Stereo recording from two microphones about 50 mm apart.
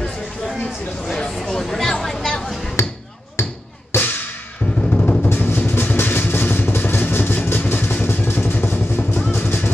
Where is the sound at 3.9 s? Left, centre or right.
Left.